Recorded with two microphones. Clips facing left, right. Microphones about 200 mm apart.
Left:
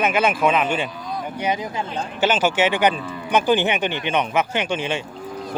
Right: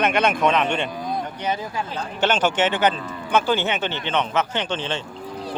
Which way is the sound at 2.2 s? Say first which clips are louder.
Left 1 dB; 10° left (ahead or behind).